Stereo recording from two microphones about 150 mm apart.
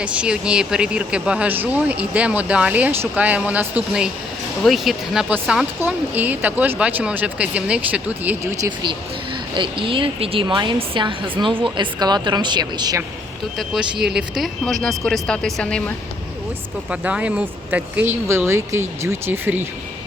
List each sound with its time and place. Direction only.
0.0 s speech: 5° right (ahead or behind)
9.6 s a woman's voice: 35° right (ahead or behind)
14.0 s speech: 5° right (ahead or behind)
16.9 s speech: 10° right (ahead or behind)